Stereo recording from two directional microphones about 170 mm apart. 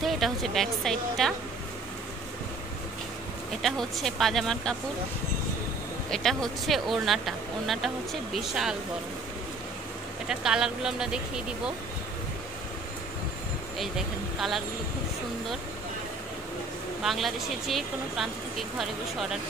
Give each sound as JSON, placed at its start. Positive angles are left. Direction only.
{"t": 0.0, "sound": "speech", "side_deg": 0}
{"t": 3.6, "sound": "speech", "side_deg": 0}
{"t": 6.0, "sound": "speech", "side_deg": 5}
{"t": 10.2, "sound": "speech", "side_deg": -5}
{"t": 13.7, "sound": "speech", "side_deg": 0}
{"t": 17.0, "sound": "speech", "side_deg": 0}